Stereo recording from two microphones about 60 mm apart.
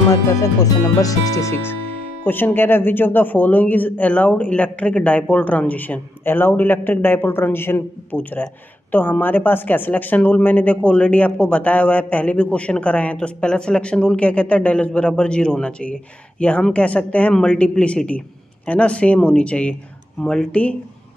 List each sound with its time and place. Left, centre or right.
0.1 s speech: left
1.5 s speech: left
8.2 s speech: left
17.3 s a woman's voice: centre
20.2 s speech: centre
20.5 s speech: centre